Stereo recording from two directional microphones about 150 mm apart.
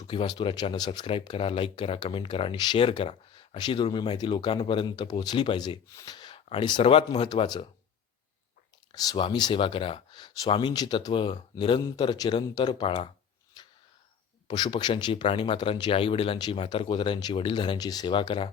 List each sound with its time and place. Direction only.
0.1 s speech: 35° left (ahead or behind)
8.9 s speech: 25° left (ahead or behind)
13.6 s a sound: 25° left (ahead or behind)
14.4 s speech: 30° left (ahead or behind)